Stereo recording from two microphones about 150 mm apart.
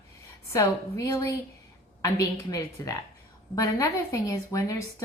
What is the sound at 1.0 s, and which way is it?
A woman's voice, 20° left (ahead or behind).